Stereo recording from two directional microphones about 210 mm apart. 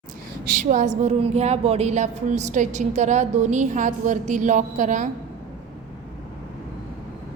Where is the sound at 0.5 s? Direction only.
35° right (ahead or behind).